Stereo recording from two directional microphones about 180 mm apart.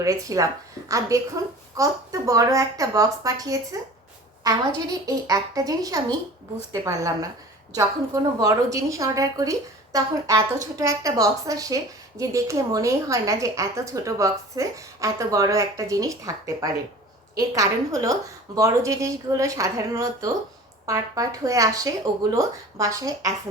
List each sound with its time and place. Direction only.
0.0 s a woman's voice: 20° right (ahead or behind)